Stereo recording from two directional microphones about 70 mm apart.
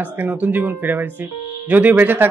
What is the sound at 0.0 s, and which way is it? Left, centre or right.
A man's voice, right.